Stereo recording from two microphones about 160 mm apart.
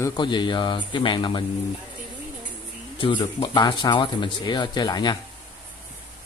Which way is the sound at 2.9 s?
30° left (ahead or behind).